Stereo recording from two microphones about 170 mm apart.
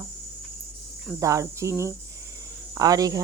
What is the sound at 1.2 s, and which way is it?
Speech, 20° right (ahead or behind).